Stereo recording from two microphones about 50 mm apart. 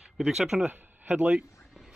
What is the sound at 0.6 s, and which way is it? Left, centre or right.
Speech, right.